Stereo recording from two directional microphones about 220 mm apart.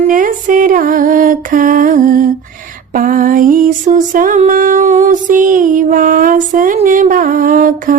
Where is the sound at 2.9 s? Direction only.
40° right (ahead or behind).